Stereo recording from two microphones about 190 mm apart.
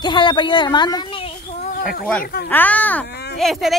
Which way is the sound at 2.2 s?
55° left (ahead or behind).